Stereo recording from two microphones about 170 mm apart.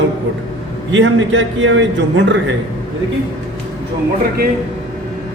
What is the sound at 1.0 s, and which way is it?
A man's voice, 90° right.